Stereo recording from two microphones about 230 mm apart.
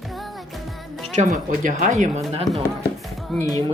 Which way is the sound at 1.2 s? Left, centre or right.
Right.